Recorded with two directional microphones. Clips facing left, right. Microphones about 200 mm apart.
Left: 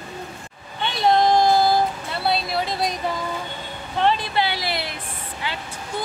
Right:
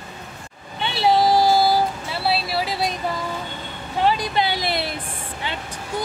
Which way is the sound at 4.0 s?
10° right (ahead or behind).